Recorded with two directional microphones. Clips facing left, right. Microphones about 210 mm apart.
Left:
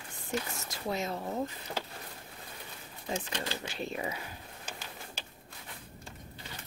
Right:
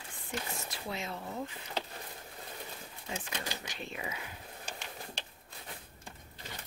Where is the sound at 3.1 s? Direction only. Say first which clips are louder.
Left 5 dB; 35° left (ahead or behind).